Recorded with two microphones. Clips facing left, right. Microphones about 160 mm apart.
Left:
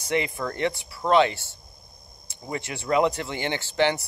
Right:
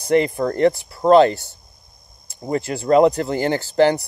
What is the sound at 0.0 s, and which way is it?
Speech, 35° right (ahead or behind).